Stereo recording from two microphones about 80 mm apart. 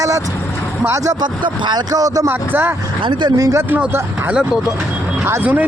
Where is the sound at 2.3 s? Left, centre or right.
Right.